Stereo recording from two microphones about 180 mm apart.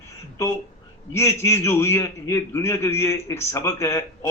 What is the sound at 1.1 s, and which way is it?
A man's voice, 15° left (ahead or behind).